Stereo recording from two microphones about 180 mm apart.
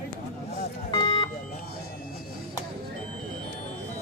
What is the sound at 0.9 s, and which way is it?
Vehicle, 25° left (ahead or behind).